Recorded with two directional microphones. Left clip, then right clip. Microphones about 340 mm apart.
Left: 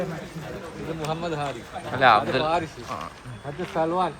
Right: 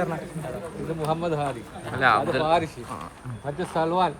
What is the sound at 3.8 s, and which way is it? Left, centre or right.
Speech, right.